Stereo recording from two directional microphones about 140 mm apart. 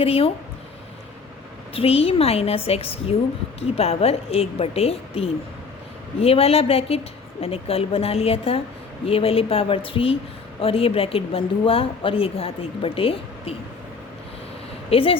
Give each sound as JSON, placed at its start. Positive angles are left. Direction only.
{"t": 0.0, "sound": "speech", "side_deg": 45}
{"t": 1.7, "sound": "speech", "side_deg": 45}
{"t": 14.8, "sound": "speech", "side_deg": 40}